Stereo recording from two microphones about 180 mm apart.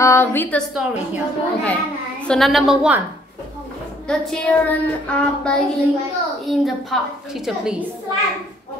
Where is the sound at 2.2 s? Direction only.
5° left (ahead or behind).